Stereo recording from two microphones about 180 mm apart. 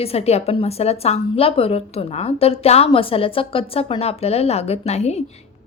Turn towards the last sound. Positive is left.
turn(degrees=35)  # may be behind; listen again after turning